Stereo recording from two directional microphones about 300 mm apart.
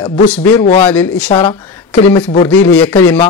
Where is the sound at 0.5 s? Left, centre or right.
Centre.